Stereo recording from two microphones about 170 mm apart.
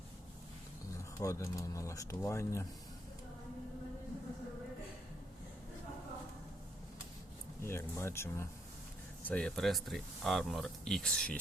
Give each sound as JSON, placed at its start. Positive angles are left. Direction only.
{"t": 1.2, "sound": "speech", "side_deg": 20}
{"t": 7.6, "sound": "speech", "side_deg": 15}